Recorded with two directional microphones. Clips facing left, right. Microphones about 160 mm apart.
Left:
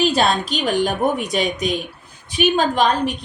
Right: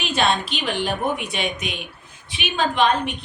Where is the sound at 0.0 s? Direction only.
35° left (ahead or behind).